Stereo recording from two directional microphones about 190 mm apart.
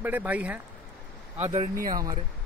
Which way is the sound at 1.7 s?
50° right (ahead or behind).